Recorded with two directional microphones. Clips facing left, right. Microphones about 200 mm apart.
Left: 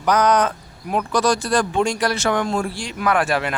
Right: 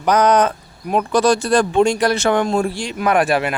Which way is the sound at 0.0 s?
20° right (ahead or behind).